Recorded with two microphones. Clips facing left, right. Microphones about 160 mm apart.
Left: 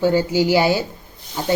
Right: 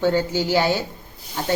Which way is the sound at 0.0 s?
10° left (ahead or behind).